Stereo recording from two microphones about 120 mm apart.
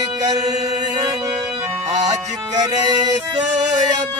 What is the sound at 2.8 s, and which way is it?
Music, 35° right (ahead or behind).